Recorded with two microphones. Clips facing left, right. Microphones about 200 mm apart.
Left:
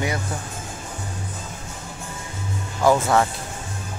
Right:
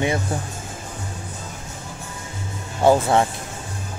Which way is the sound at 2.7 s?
30° right (ahead or behind).